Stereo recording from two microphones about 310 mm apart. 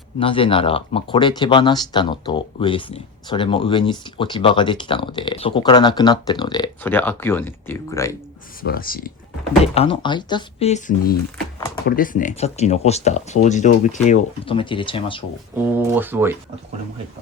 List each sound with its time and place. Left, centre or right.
0.2 s speech: centre
8.6 s speech: left
9.7 s speech: centre
15.5 s speech: centre